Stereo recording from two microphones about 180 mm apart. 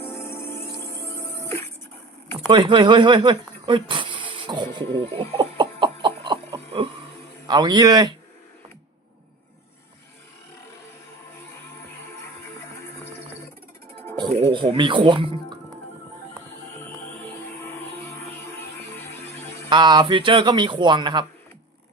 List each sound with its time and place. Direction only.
0.0 s music: 15° left (ahead or behind)
2.5 s a sound: 25° right (ahead or behind)
7.4 s a man's voice: 25° right (ahead or behind)
14.2 s speech: 30° right (ahead or behind)
19.7 s a man's voice: 25° right (ahead or behind)